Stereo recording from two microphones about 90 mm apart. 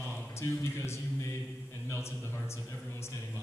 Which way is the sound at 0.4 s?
30° left (ahead or behind).